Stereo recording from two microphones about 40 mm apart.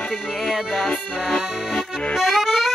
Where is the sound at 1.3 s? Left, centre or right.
Centre.